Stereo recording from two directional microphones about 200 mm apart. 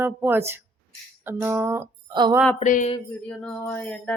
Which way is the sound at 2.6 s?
40° left (ahead or behind).